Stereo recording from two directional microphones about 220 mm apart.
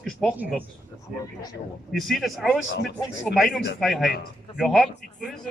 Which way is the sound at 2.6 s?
60° left (ahead or behind).